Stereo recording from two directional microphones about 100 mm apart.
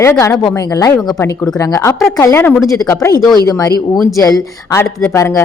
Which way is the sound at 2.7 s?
30° left (ahead or behind).